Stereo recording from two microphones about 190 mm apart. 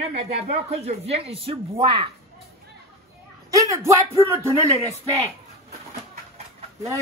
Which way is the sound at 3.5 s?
15° right (ahead or behind).